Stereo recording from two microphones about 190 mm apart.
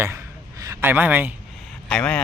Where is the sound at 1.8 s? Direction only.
5° left (ahead or behind).